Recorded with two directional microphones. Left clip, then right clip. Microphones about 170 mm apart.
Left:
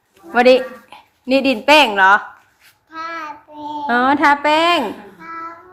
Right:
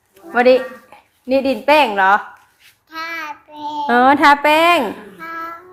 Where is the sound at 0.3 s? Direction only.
10° left (ahead or behind).